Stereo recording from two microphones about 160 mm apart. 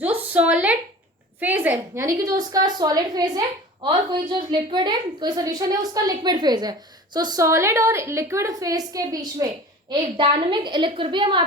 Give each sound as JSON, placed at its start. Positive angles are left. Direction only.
{"t": 0.0, "sound": "a woman's voice", "side_deg": -10}